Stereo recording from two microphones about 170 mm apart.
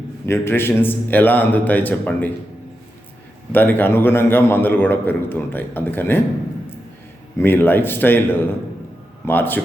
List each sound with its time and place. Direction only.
0.3 s a man's voice: 15° left (ahead or behind)
3.5 s a man's voice: 10° left (ahead or behind)
7.3 s a man's voice: 15° left (ahead or behind)